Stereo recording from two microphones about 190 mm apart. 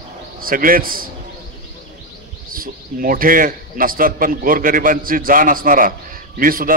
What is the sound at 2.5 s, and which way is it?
A man's voice, 50° right (ahead or behind).